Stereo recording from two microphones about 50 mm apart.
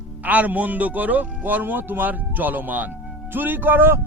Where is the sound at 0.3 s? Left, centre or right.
Right.